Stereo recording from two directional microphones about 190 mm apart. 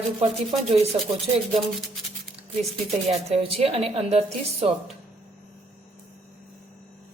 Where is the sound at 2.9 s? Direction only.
35° right (ahead or behind).